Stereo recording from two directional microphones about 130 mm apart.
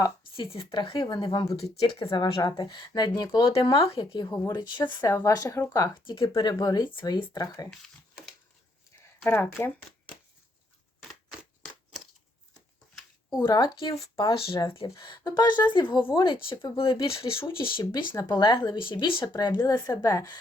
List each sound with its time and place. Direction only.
0.3 s a woman's voice: 40° left (ahead or behind)
1.5 s a woman's voice: 50° left (ahead or behind)
3.5 s speech: 45° left (ahead or behind)
4.0 s a woman's voice: 30° left (ahead or behind)
5.7 s speech: 35° left (ahead or behind)
8.9 s a sound: 20° left (ahead or behind)
11.6 s a sound: 5° left (ahead or behind)
13.4 s speech: 35° left (ahead or behind)
14.0 s a woman's voice: 45° left (ahead or behind)